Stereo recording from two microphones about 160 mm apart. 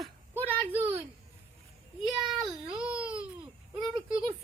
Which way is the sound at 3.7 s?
Centre (ahead or behind).